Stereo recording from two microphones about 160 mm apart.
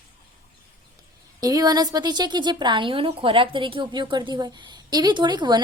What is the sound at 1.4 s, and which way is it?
Speech, 25° right (ahead or behind).